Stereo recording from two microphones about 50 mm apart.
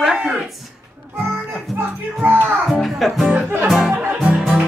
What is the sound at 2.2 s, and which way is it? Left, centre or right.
Music, right.